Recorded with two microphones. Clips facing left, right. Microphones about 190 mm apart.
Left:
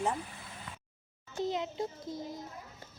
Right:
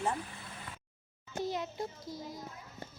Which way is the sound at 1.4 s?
20° left (ahead or behind).